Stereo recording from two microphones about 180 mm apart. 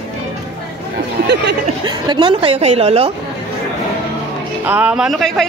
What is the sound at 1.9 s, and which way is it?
A woman's voice, 25° right (ahead or behind).